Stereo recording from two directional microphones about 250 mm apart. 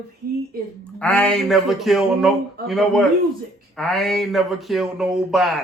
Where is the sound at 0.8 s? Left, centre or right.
Centre.